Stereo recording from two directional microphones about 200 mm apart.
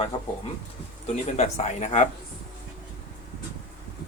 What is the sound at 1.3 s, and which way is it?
Speech, 35° left (ahead or behind).